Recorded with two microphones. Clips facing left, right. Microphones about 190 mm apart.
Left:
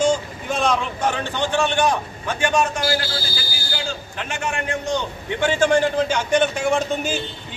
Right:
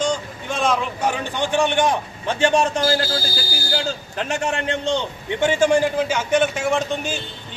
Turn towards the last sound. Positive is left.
turn(degrees=0)  # may be behind; listen again after turning